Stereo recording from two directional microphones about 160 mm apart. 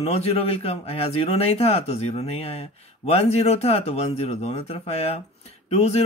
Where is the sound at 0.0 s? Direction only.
40° left (ahead or behind).